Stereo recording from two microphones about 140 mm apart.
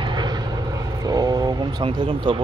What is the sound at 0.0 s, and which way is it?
Vehicle, 30° right (ahead or behind).